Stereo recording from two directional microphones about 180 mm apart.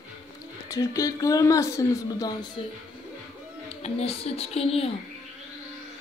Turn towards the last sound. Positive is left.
turn(degrees=30)  # may be behind; listen again after turning